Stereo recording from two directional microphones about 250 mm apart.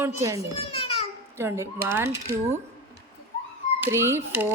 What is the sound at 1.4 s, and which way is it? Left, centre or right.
Speech, centre.